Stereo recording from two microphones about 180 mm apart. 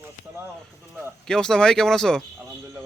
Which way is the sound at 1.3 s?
5° left (ahead or behind).